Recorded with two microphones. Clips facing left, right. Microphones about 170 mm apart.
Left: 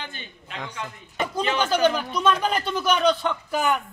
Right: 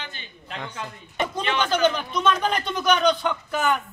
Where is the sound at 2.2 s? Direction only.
5° left (ahead or behind).